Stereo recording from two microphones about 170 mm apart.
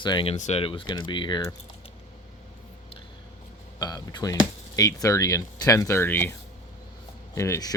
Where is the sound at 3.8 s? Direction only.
25° left (ahead or behind).